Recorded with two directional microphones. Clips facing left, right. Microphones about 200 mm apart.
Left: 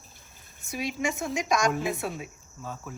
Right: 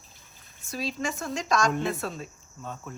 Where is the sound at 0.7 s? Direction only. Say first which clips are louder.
Left 1 dB; 15° left (ahead or behind).